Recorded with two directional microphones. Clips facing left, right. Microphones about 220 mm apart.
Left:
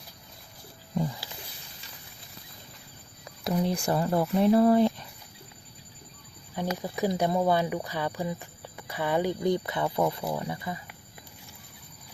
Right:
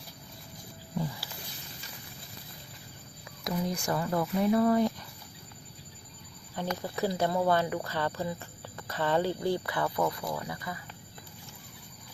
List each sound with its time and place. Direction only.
3.4 s speech: 30° left (ahead or behind)
6.6 s speech: 15° left (ahead or behind)